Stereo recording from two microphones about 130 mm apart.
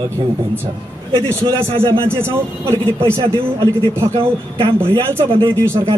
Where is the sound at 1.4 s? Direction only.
40° right (ahead or behind).